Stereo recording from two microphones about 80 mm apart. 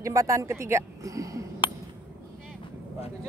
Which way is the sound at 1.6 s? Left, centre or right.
Left.